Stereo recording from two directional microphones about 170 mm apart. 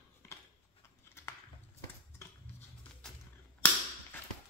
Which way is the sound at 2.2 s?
15° left (ahead or behind).